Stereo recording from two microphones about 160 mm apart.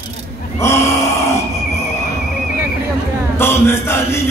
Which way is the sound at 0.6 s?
15° left (ahead or behind).